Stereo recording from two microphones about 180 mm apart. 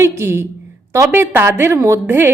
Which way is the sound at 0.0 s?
15° right (ahead or behind).